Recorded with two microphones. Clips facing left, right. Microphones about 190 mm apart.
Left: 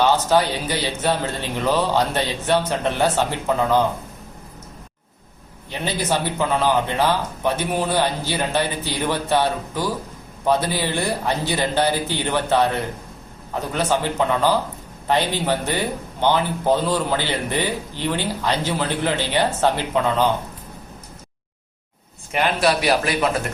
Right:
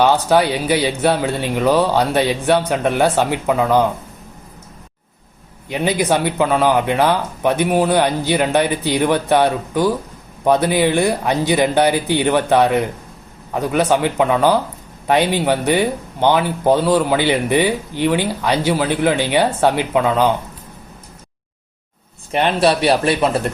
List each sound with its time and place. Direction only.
0.0 s a man's voice: 15° right (ahead or behind)
5.6 s a man's voice: 15° right (ahead or behind)
22.3 s a man's voice: 30° right (ahead or behind)